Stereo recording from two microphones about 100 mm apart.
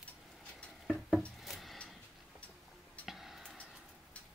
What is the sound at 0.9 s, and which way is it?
Wood, centre (ahead or behind).